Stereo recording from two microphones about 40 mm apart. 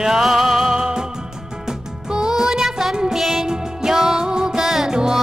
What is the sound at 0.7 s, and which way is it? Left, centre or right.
Music, centre.